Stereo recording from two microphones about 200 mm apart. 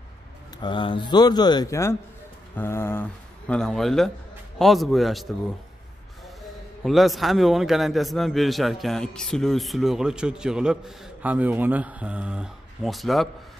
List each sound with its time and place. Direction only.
0.6 s a man's voice: 25° left (ahead or behind); by 5.3 s centre (ahead or behind)
6.8 s a man's voice: centre (ahead or behind)